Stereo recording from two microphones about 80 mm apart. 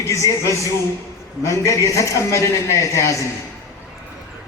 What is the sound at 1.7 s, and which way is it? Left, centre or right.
A man's voice, left.